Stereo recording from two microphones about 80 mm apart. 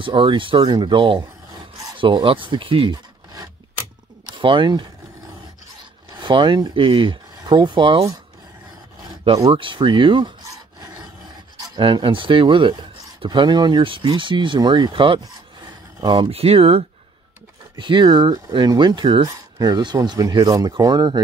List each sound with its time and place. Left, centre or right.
0.0 s speech: right
4.3 s speech: right
6.1 s speech: right
9.5 s speech: right
11.7 s speech: right
17.7 s speech: right
18.7 s speech: right